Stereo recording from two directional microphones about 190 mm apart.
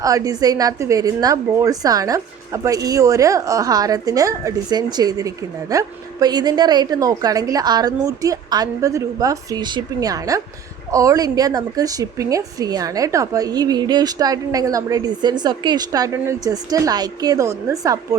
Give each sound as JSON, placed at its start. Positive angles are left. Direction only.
{"t": 0.0, "sound": "a woman's voice", "side_deg": -20}